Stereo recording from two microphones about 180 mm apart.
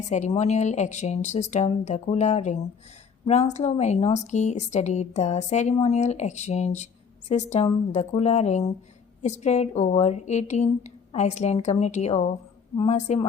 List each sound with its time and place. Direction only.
0.0 s a woman's voice: 40° left (ahead or behind)